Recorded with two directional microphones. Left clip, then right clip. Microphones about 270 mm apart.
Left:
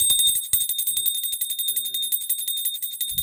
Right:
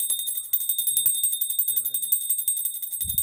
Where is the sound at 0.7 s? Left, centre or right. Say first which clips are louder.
Left 2 dB; centre.